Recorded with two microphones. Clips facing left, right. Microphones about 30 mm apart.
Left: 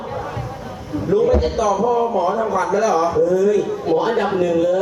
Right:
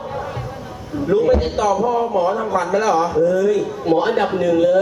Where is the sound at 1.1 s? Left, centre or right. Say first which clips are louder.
Even; right.